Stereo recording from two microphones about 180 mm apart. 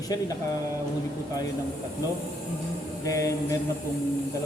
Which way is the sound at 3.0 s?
15° left (ahead or behind).